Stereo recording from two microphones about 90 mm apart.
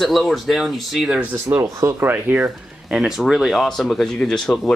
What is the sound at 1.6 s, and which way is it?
Speech, 35° right (ahead or behind).